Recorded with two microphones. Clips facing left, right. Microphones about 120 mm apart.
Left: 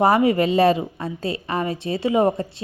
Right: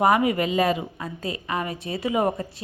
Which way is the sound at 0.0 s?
30° left (ahead or behind).